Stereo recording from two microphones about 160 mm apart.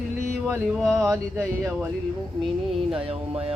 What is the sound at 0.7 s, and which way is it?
Speech, centre (ahead or behind).